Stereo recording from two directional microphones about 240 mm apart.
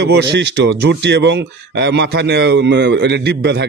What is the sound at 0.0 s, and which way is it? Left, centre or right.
A man's voice, right.